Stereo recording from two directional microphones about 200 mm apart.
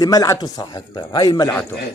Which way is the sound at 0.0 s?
15° left (ahead or behind).